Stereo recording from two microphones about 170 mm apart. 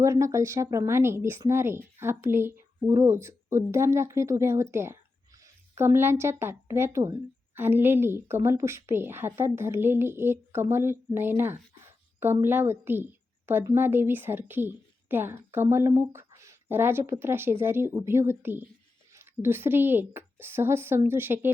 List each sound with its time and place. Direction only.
0.0 s a woman's voice: 15° right (ahead or behind)